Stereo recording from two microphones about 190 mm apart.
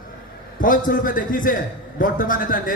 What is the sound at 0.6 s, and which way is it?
A man's voice, 45° left (ahead or behind).